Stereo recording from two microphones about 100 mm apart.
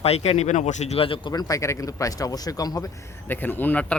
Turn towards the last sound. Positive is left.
turn(degrees=15)  # may be behind; listen again after turning